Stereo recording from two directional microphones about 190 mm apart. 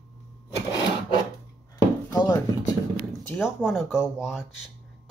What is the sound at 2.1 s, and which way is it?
Speech, 20° left (ahead or behind).